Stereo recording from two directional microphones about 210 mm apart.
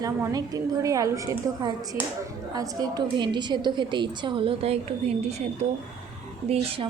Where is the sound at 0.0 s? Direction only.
15° right (ahead or behind).